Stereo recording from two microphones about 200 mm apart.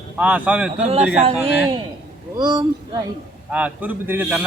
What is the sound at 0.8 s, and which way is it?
Speech, 30° right (ahead or behind).